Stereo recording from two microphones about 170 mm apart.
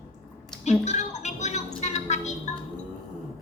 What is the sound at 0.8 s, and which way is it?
Music, 45° left (ahead or behind).